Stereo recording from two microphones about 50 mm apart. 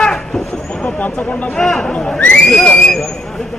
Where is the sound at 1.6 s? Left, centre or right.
Centre.